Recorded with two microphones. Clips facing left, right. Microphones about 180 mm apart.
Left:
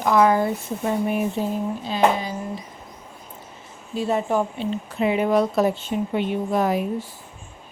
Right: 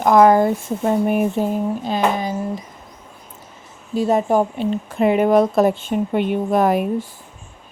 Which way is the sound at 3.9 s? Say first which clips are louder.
Right 5 dB; 40° right (ahead or behind).